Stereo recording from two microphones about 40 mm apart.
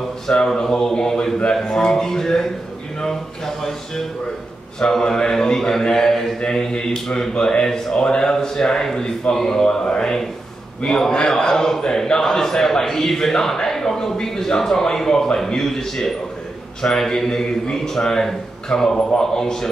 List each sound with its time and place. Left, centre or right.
0.3 s a man's voice: centre